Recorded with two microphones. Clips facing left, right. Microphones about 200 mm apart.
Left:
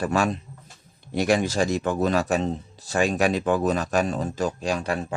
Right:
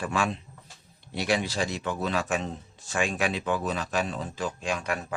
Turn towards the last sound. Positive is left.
turn(degrees=30)  # may be behind; listen again after turning